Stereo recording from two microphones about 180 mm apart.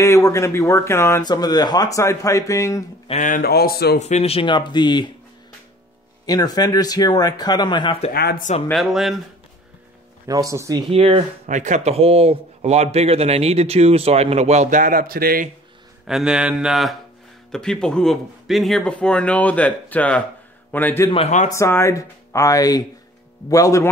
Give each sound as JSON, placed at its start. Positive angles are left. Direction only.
{"t": 0.0, "sound": "speech", "side_deg": 15}
{"t": 3.1, "sound": "speech", "side_deg": 45}
{"t": 4.0, "sound": "speech", "side_deg": 35}
{"t": 6.2, "sound": "speech", "side_deg": 20}
{"t": 8.1, "sound": "speech", "side_deg": 60}
{"t": 8.6, "sound": "speech", "side_deg": 0}
{"t": 10.2, "sound": "speech", "side_deg": -20}
{"t": 10.9, "sound": "speech", "side_deg": -30}
{"t": 16.1, "sound": "speech", "side_deg": -5}
{"t": 21.1, "sound": "speech", "side_deg": 35}
{"t": 21.5, "sound": "speech", "side_deg": 15}